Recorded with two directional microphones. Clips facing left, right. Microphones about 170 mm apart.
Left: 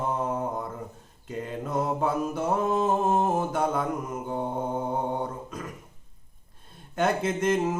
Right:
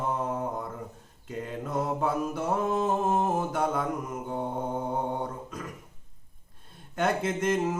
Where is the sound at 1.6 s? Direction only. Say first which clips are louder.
Left 2 dB; 20° left (ahead or behind).